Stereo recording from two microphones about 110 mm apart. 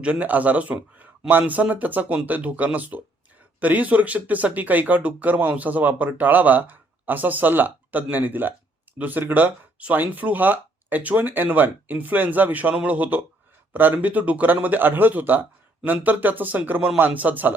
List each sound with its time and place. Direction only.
0.0 s speech: 15° right (ahead or behind)